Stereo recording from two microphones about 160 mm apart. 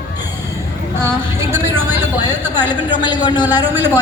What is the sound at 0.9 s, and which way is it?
A woman's voice, 15° right (ahead or behind).